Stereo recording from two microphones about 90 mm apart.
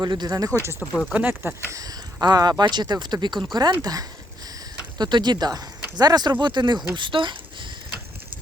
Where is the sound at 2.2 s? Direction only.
50° right (ahead or behind).